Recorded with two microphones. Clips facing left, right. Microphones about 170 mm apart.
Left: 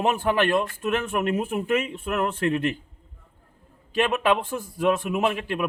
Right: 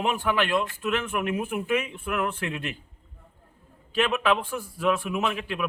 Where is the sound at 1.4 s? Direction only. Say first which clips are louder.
Left 3 dB; 25° left (ahead or behind).